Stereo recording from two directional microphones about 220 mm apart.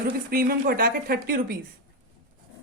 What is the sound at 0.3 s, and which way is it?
Speech, 45° right (ahead or behind).